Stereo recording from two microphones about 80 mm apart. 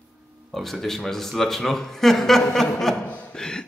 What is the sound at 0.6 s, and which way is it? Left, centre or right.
A man's voice, centre.